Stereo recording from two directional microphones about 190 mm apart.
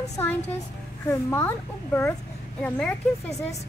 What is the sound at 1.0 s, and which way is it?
A woman's voice, 10° left (ahead or behind).